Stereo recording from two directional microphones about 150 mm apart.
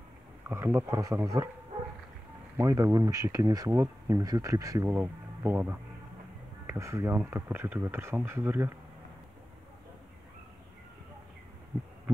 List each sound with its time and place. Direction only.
0.5 s speech: 15° right (ahead or behind)
2.5 s speech: 20° right (ahead or behind)